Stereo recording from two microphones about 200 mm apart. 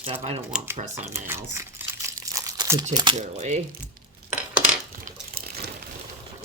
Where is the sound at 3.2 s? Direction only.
35° right (ahead or behind).